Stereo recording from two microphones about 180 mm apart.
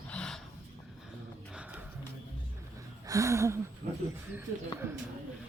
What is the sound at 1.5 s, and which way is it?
Music, 5° right (ahead or behind).